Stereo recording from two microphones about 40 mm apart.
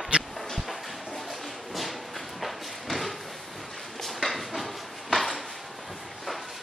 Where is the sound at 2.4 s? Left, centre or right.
Centre.